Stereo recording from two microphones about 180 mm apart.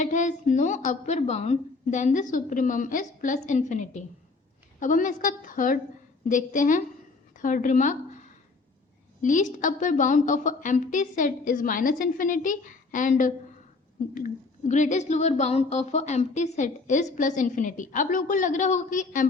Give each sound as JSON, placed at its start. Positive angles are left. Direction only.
{"t": 0.0, "sound": "speech", "side_deg": 40}
{"t": 9.2, "sound": "speech", "side_deg": 45}